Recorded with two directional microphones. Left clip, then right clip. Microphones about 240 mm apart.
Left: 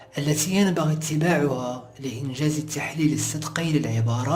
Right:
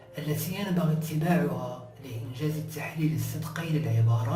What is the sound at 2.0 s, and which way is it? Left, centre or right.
Speech, left.